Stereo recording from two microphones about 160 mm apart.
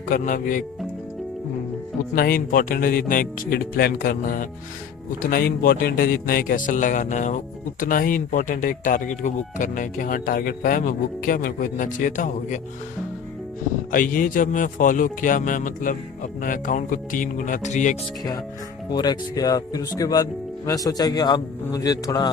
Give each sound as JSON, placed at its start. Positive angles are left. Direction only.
{"t": 0.1, "sound": "speech", "side_deg": 55}
{"t": 2.1, "sound": "speech", "side_deg": 65}
{"t": 13.9, "sound": "speech", "side_deg": 60}
{"t": 18.9, "sound": "a man's voice", "side_deg": 25}